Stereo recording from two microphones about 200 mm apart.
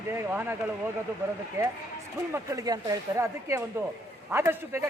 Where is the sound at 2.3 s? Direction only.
15° right (ahead or behind).